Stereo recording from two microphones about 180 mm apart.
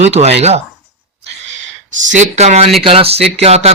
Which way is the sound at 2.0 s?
40° right (ahead or behind).